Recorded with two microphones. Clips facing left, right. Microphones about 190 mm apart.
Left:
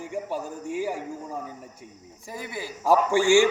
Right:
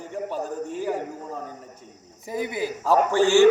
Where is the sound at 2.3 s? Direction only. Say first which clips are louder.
Right 8 dB; 20° right (ahead or behind).